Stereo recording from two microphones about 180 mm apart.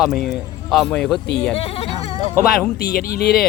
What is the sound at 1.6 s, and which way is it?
Speech, 35° left (ahead or behind).